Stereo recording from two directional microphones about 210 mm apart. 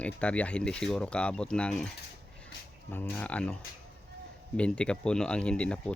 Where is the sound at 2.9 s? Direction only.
10° left (ahead or behind).